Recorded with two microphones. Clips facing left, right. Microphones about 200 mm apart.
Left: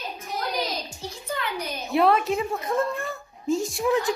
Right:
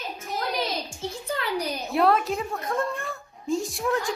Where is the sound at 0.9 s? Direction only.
30° right (ahead or behind).